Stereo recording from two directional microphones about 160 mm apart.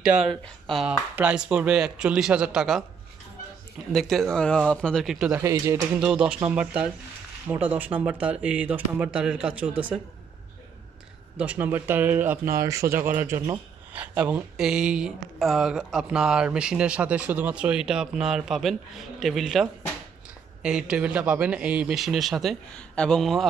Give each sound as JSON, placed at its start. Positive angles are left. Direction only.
{"t": 0.0, "sound": "speech", "side_deg": -5}
{"t": 3.9, "sound": "speech", "side_deg": 0}
{"t": 5.4, "sound": "speech", "side_deg": -20}
{"t": 5.8, "sound": "speech", "side_deg": -5}
{"t": 11.3, "sound": "speech", "side_deg": -10}